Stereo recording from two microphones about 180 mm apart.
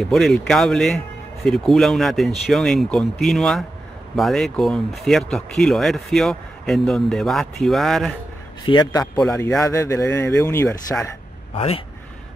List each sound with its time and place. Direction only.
0.0 s speech: centre (ahead or behind)
8.6 s a man's voice: 25° left (ahead or behind)
11.5 s speech: 30° left (ahead or behind)